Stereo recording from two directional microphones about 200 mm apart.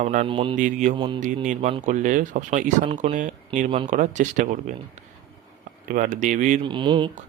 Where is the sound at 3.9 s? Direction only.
35° right (ahead or behind).